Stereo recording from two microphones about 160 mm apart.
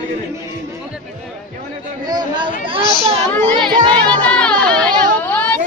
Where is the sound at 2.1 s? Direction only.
25° right (ahead or behind).